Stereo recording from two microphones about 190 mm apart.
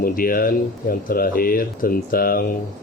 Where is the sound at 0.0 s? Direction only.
50° left (ahead or behind).